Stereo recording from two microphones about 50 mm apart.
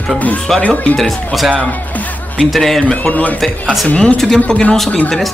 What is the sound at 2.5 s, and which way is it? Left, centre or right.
Speech, centre.